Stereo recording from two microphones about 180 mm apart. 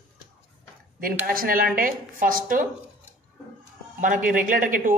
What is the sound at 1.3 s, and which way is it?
A woman's voice, 55° right (ahead or behind).